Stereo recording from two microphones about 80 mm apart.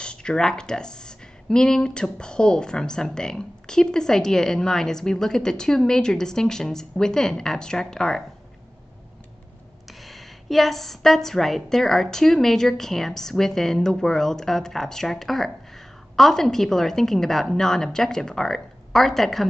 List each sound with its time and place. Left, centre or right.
0.0 s a woman's voice: centre
9.8 s a woman's voice: centre